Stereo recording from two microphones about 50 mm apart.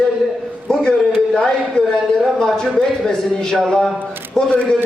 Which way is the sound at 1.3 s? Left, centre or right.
Centre.